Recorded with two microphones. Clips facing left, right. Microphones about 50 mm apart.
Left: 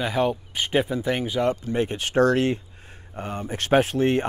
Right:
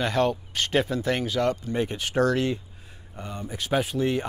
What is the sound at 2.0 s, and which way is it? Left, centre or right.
Speech, left.